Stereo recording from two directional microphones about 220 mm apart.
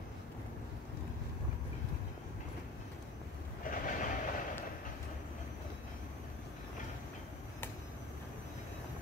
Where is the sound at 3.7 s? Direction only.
35° left (ahead or behind).